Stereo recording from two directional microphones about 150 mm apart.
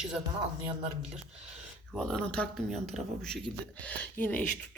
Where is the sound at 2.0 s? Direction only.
5° left (ahead or behind).